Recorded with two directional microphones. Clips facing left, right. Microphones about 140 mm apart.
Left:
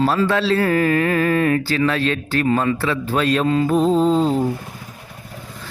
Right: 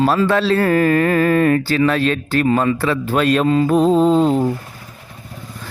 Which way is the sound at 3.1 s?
55° right (ahead or behind).